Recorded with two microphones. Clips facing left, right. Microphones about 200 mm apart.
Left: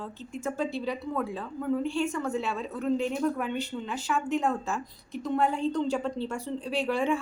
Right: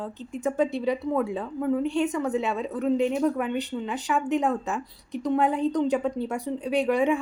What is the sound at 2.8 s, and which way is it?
Speech, 5° right (ahead or behind).